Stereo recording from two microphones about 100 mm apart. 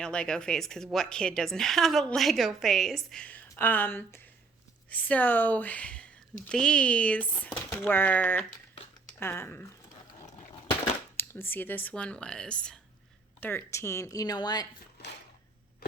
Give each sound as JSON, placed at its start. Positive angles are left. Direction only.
{"t": 0.0, "sound": "a woman's voice", "side_deg": 10}
{"t": 11.2, "sound": "speech", "side_deg": 20}
{"t": 13.4, "sound": "speech", "side_deg": 20}